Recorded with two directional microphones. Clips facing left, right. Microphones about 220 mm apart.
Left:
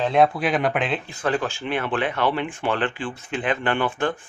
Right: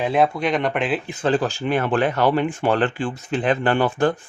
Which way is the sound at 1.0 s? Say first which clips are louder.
Right 4 dB; 30° right (ahead or behind).